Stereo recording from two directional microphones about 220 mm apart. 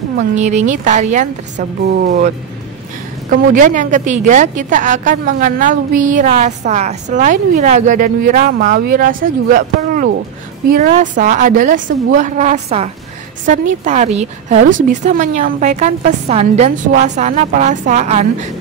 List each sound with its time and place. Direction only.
0.4 s a woman's voice: 30° right (ahead or behind)